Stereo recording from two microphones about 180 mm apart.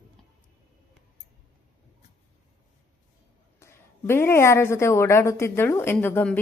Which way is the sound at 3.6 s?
15° left (ahead or behind).